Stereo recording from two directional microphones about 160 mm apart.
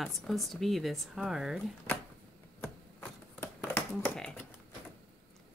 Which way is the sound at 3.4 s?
15° left (ahead or behind).